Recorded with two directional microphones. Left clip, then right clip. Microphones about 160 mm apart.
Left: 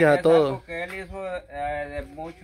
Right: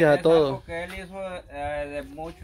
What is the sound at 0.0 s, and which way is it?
A man's voice, 10° left (ahead or behind).